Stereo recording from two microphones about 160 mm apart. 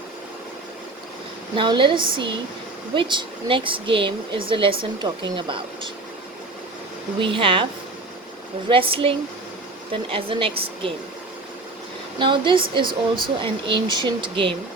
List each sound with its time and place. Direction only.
1.5 s speech: 30° right (ahead or behind)
7.2 s speech: 35° right (ahead or behind)
8.7 s speech: 35° right (ahead or behind)
12.2 s speech: 30° right (ahead or behind)